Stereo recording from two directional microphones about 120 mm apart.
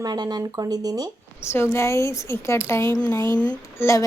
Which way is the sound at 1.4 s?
20° left (ahead or behind).